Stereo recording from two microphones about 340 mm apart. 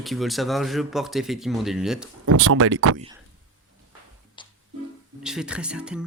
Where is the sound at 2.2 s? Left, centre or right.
Right.